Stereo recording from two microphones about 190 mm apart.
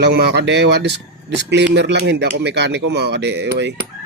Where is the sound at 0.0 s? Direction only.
65° right (ahead or behind).